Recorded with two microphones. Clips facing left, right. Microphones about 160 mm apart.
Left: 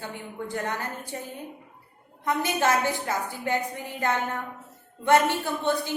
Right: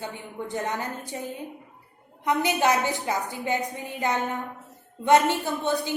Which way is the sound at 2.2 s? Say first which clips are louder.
Right 2 dB; 15° right (ahead or behind).